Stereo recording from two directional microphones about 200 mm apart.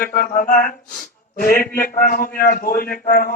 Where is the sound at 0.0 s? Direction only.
45° left (ahead or behind).